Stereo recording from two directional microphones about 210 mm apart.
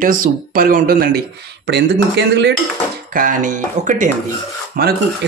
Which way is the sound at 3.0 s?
40° right (ahead or behind).